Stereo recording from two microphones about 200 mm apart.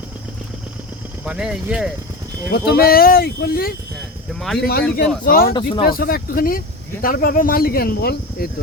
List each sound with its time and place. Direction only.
1.2 s speech: 5° right (ahead or behind)
2.5 s speech: 50° left (ahead or behind)
4.4 s speech: centre (ahead or behind)
4.6 s speech: 50° left (ahead or behind)